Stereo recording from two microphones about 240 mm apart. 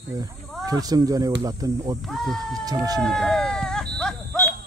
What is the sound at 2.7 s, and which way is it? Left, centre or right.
Speech, centre.